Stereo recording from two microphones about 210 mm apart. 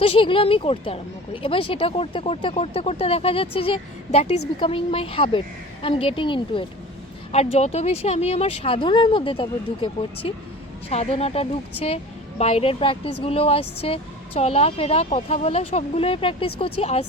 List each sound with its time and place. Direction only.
0.0 s speech: 25° left (ahead or behind)